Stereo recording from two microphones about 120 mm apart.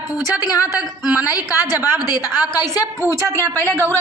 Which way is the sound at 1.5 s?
30° left (ahead or behind).